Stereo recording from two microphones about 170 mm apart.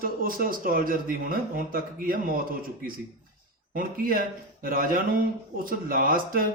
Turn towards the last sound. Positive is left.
turn(degrees=-55)  # may be behind; listen again after turning